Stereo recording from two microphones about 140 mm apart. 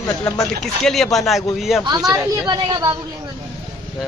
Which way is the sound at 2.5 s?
30° right (ahead or behind).